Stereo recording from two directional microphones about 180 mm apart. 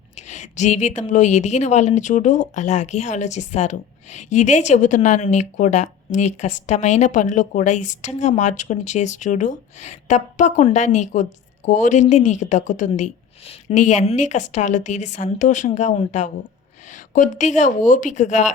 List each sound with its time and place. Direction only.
0.2 s a woman's voice: 40° left (ahead or behind)